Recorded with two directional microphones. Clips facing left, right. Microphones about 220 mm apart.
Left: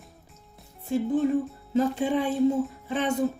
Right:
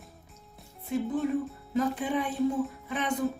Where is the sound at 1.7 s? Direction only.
30° left (ahead or behind).